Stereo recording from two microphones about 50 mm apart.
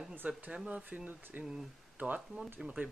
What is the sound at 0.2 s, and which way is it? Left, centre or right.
Speech, right.